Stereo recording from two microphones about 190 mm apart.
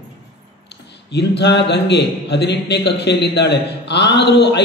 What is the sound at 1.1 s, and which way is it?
A man's voice, 60° left (ahead or behind).